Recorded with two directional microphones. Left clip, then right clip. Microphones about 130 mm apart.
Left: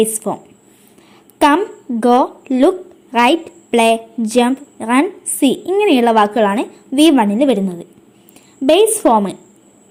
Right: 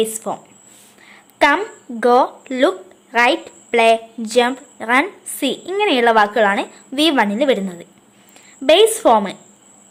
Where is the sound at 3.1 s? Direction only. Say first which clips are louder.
Left 2 dB; 25° left (ahead or behind).